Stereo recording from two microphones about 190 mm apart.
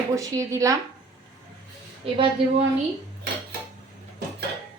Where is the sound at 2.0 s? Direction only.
30° right (ahead or behind).